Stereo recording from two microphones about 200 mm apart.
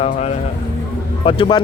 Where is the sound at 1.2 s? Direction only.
25° left (ahead or behind).